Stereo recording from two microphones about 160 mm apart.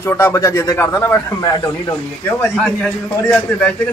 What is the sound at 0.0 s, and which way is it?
Speech, 15° left (ahead or behind).